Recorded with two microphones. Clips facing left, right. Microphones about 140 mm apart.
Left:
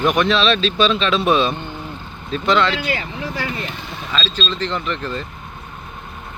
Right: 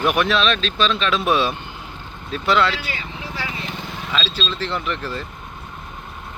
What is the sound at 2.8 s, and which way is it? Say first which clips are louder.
Vehicle: left 7 dB; 55° left (ahead or behind).